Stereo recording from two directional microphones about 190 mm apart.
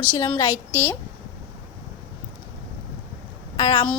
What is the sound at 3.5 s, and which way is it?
Speech, 20° left (ahead or behind).